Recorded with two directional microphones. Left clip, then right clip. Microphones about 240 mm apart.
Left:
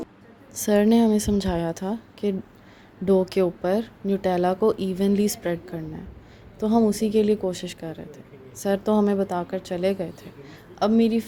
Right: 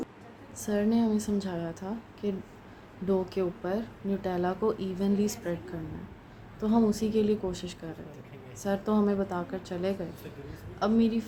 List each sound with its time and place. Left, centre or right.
0.5 s a woman's voice: left
6.6 s a woman's voice: left